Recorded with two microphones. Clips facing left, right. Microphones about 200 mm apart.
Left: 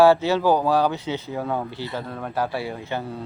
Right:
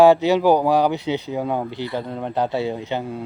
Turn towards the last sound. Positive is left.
turn(degrees=-15)  # may be behind; listen again after turning